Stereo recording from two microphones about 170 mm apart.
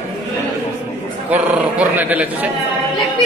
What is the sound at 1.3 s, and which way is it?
A man's voice, 10° right (ahead or behind).